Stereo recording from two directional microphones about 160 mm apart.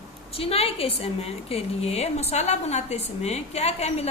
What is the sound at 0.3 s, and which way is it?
A woman's voice, 40° left (ahead or behind).